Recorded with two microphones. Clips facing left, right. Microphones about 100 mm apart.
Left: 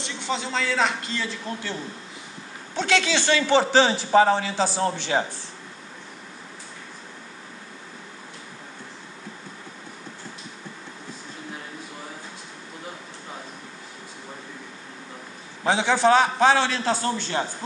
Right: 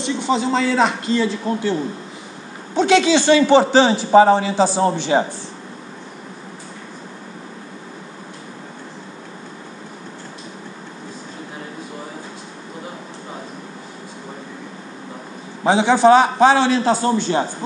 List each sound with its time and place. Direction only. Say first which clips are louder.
0.0 s a man's voice: right 10 dB; 15° right (ahead or behind); by 1.7 s 30° right (ahead or behind)
2.7 s a man's voice: right 9 dB; 10° right (ahead or behind)
15.6 s a man's voice: right 7 dB; 5° right (ahead or behind)